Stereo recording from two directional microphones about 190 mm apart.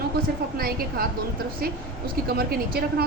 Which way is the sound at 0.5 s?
50° right (ahead or behind).